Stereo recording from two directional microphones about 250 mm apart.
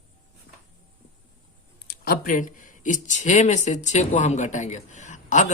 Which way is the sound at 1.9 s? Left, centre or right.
Left.